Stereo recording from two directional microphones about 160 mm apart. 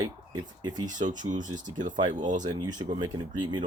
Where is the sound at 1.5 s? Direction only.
55° right (ahead or behind).